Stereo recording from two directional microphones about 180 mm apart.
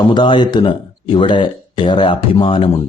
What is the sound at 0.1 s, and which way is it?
Speech, 25° left (ahead or behind).